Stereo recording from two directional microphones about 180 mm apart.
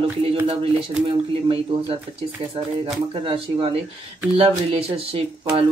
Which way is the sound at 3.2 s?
30° right (ahead or behind).